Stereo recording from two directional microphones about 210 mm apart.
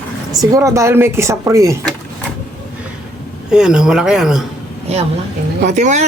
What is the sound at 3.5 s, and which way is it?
Speech, 5° right (ahead or behind).